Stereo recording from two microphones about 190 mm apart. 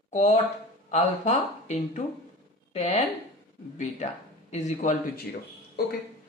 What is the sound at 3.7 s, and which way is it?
Speech, 35° left (ahead or behind).